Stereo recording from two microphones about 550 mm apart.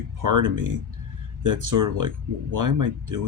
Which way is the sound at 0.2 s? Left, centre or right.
Right.